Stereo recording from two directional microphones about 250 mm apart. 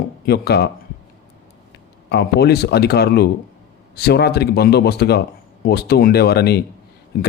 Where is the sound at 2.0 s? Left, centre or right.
Left.